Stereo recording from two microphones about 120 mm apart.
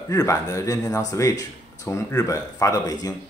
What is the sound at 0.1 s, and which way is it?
Speech, 25° left (ahead or behind).